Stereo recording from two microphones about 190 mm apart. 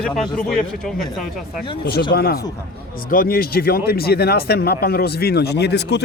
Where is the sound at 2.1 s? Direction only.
50° left (ahead or behind).